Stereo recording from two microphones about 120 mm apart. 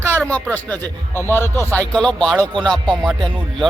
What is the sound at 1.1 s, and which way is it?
Speech, 20° left (ahead or behind).